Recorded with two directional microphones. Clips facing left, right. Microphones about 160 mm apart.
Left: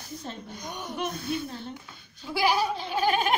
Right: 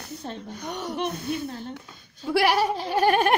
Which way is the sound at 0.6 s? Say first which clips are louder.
Right 6 dB; 75° right (ahead or behind).